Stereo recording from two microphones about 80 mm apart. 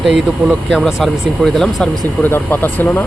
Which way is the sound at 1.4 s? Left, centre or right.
Centre.